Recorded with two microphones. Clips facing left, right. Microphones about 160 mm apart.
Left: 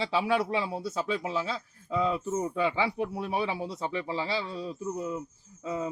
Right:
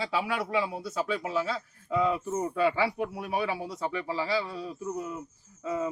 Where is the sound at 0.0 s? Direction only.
30° left (ahead or behind).